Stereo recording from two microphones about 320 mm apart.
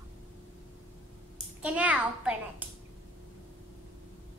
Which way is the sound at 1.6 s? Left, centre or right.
Centre.